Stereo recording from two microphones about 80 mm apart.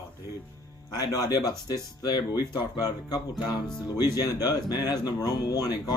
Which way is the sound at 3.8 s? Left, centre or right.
Left.